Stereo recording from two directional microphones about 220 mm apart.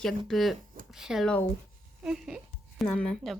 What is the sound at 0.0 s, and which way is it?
A woman's voice, centre (ahead or behind).